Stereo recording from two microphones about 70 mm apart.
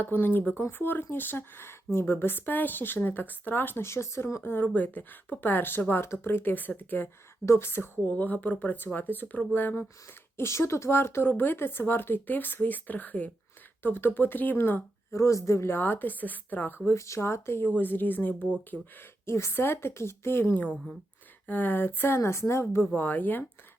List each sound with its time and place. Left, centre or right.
0.0 s a woman's voice: left
7.4 s speech: left
8.0 s a woman's voice: left
10.3 s a woman's voice: left
15.1 s a woman's voice: left
16.9 s a woman's voice: left
19.2 s speech: left
23.0 s a woman's voice: left